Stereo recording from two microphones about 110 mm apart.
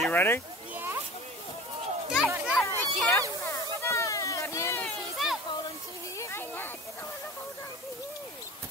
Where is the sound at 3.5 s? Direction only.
25° left (ahead or behind).